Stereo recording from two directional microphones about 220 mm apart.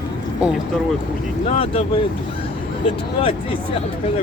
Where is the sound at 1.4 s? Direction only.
25° left (ahead or behind).